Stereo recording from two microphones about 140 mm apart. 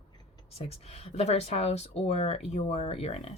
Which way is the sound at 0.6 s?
50° left (ahead or behind).